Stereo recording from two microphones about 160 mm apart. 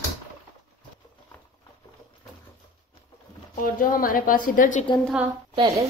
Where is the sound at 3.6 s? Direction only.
60° left (ahead or behind).